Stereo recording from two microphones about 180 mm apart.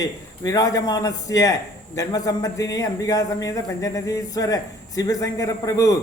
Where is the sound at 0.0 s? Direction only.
20° left (ahead or behind).